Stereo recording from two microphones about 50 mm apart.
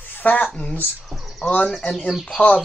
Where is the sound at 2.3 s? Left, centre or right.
Left.